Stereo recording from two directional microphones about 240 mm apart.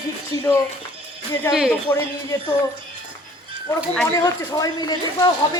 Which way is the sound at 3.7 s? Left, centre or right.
Centre.